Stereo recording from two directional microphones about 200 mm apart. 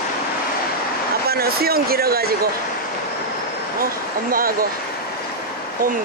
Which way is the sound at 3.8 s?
45° right (ahead or behind).